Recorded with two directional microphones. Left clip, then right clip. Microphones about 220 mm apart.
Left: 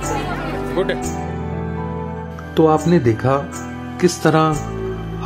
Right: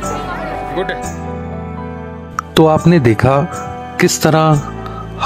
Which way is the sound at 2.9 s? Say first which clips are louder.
Right 5 dB; 45° right (ahead or behind).